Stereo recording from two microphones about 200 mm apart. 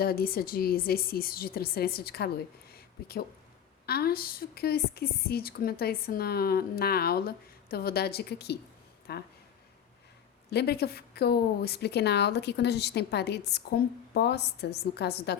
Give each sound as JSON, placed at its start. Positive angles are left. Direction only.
{"t": 0.0, "sound": "speech", "side_deg": 50}
{"t": 2.7, "sound": "a sound", "side_deg": 50}
{"t": 3.8, "sound": "speech", "side_deg": 50}
{"t": 10.5, "sound": "a woman's voice", "side_deg": 55}